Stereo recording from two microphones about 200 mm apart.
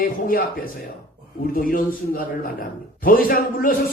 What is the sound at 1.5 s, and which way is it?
A man's voice, 45° left (ahead or behind).